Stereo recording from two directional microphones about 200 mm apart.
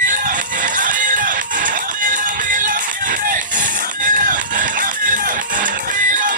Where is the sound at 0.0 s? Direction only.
40° right (ahead or behind).